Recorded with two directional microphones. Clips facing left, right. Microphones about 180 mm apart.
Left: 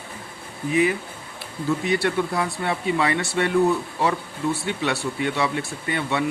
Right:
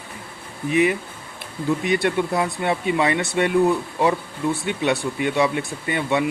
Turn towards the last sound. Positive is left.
turn(degrees=-20)  # may be behind; listen again after turning